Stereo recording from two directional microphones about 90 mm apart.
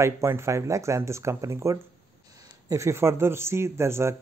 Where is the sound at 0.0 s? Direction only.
30° right (ahead or behind).